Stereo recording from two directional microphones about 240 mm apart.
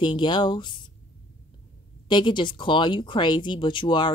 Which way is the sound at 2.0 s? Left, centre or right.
Centre.